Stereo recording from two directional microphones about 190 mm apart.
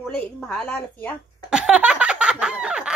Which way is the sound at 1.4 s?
5° right (ahead or behind).